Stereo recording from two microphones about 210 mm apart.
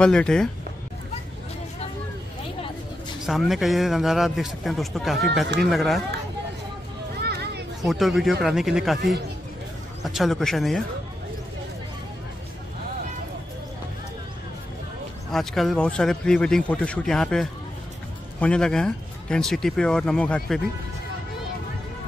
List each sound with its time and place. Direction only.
0.0 s a man's voice: 5° left (ahead or behind)
3.3 s a man's voice: centre (ahead or behind)
7.2 s children playing: 50° right (ahead or behind)
7.8 s a man's voice: centre (ahead or behind)
15.3 s a man's voice: centre (ahead or behind)